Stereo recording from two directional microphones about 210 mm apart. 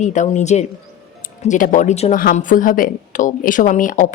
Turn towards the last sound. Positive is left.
turn(degrees=40)  # may be behind; listen again after turning